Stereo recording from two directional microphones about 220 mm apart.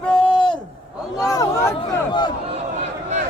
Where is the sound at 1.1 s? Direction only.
15° left (ahead or behind).